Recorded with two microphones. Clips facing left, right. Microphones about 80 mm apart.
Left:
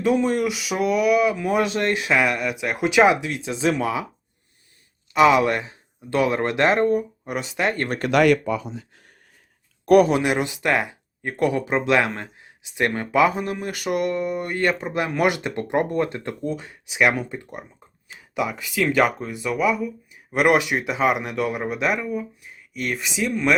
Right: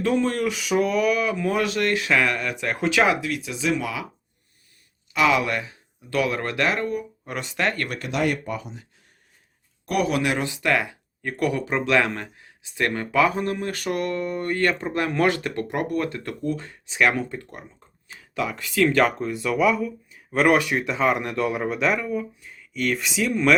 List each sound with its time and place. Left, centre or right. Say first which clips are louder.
0.0 s speech: left 2 dB; centre; by 4.0 s left
5.1 s speech: left 5 dB; left
7.3 s speech: even; centre
7.9 s speech: left 8 dB; left
9.8 s speech: left 10 dB; left
10.1 s speech: left 3 dB; left; by 19.8 s centre
20.3 s speech: left 1 dB; centre